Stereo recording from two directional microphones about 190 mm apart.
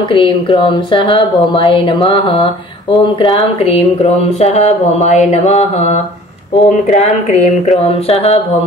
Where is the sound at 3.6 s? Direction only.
35° left (ahead or behind).